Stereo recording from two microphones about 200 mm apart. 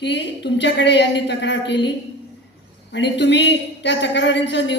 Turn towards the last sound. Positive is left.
turn(degrees=60)  # may be behind; listen again after turning